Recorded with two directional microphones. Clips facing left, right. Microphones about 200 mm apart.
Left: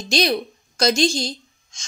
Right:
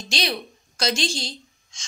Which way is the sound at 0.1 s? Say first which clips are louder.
Left 8 dB; 45° left (ahead or behind).